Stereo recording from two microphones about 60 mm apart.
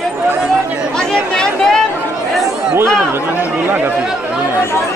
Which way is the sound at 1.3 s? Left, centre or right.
Centre.